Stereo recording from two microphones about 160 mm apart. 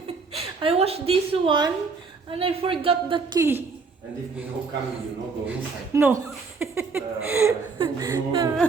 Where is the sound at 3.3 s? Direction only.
15° right (ahead or behind).